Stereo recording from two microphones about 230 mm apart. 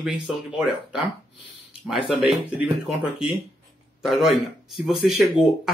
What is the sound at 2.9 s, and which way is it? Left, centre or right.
Speech, centre.